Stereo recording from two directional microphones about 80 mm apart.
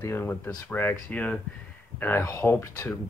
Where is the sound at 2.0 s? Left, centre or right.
Left.